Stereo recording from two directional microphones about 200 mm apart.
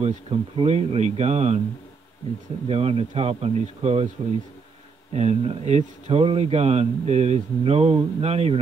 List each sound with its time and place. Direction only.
0.0 s speech: 30° right (ahead or behind)
2.7 s speech: 30° right (ahead or behind)
5.1 s speech: 30° right (ahead or behind)